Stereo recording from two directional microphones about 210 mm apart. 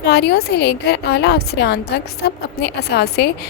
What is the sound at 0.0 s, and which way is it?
A woman's voice, 50° left (ahead or behind).